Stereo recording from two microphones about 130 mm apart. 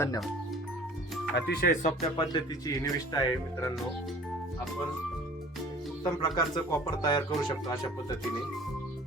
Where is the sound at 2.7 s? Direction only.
30° left (ahead or behind).